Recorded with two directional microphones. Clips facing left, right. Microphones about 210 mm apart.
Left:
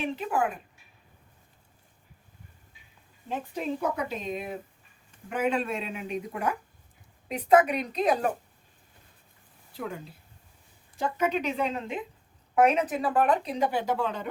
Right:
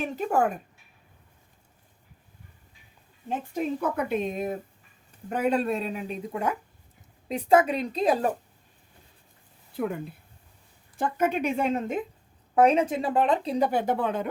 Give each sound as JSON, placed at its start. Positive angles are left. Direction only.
{"t": 0.0, "sound": "speech", "side_deg": -45}
{"t": 3.2, "sound": "speech", "side_deg": -50}
{"t": 9.7, "sound": "speech", "side_deg": -55}
{"t": 12.5, "sound": "speech", "side_deg": -30}
{"t": 13.7, "sound": "speech", "side_deg": -50}